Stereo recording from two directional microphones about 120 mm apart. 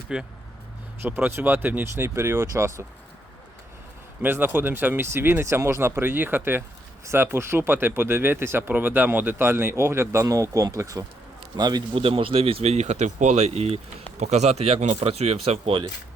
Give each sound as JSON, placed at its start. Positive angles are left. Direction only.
{"t": 0.1, "sound": "speech", "side_deg": -5}
{"t": 1.0, "sound": "speech", "side_deg": -15}
{"t": 4.2, "sound": "a man's voice", "side_deg": -15}
{"t": 11.9, "sound": "speech", "side_deg": -50}